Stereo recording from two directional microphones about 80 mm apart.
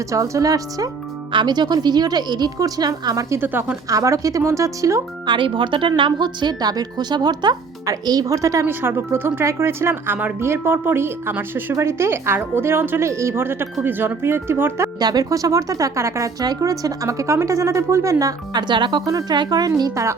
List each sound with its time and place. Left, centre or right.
0.1 s speech: right
1.3 s speech: right
3.2 s speech: right
3.8 s speech: right
5.2 s speech: right
6.0 s speech: right
8.8 s speech: right
14.9 s speech: right
16.4 s speech: right
18.5 s speech: right
19.0 s speech: right